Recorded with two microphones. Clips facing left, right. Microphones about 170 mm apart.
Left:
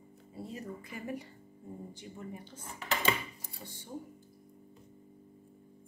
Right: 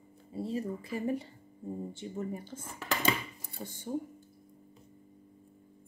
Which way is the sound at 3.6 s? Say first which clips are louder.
Right 7 dB; 40° right (ahead or behind).